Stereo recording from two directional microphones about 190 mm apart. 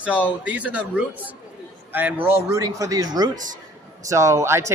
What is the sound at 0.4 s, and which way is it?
Speech, 5° right (ahead or behind).